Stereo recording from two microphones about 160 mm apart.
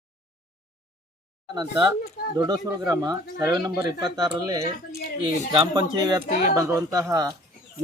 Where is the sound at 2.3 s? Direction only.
20° right (ahead or behind).